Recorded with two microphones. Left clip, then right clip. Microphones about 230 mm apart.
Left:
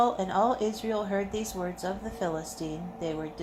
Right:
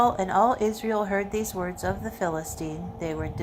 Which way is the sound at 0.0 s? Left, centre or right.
Right.